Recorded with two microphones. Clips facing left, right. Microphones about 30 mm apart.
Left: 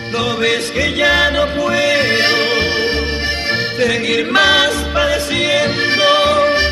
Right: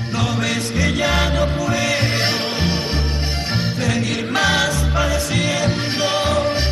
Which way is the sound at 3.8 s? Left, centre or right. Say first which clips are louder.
Left 8 dB; left.